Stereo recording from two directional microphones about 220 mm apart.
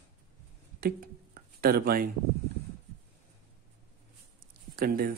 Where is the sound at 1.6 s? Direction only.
45° right (ahead or behind).